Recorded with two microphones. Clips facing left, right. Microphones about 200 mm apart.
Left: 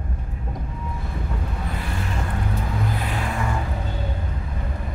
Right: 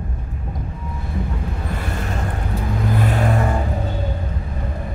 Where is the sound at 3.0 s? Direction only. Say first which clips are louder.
Right 7 dB; 45° right (ahead or behind).